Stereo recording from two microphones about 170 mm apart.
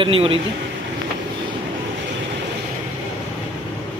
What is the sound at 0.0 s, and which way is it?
Speech, 30° right (ahead or behind).